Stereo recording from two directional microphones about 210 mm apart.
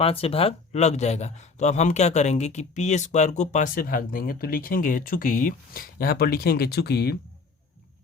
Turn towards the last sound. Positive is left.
turn(degrees=50)  # may be behind; listen again after turning